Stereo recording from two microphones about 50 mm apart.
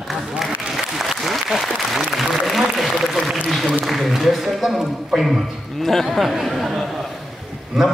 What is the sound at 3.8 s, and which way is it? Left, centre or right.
A man's voice, centre.